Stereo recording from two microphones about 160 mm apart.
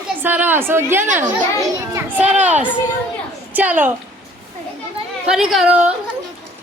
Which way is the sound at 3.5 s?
10° right (ahead or behind).